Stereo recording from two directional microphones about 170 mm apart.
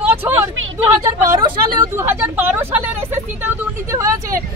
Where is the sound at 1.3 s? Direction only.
20° right (ahead or behind).